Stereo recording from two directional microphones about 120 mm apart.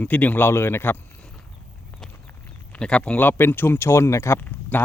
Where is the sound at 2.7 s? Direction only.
10° left (ahead or behind).